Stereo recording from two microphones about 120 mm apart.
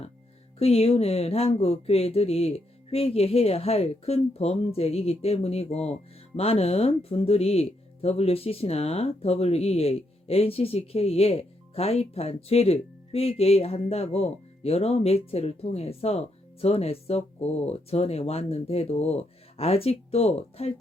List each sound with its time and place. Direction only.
0.6 s speech: 55° left (ahead or behind)